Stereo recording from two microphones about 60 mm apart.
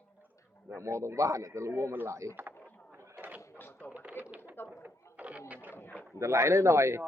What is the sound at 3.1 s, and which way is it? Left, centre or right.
Mechanisms, right.